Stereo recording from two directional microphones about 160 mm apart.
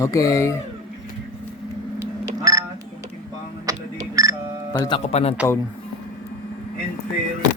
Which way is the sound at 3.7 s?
20° right (ahead or behind).